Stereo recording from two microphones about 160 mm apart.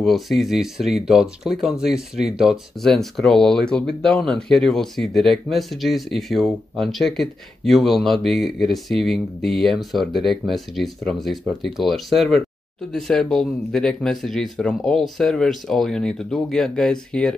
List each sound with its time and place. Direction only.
0.0 s speech: centre (ahead or behind)